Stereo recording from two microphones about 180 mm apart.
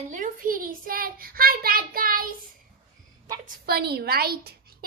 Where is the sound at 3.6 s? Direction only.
60° right (ahead or behind).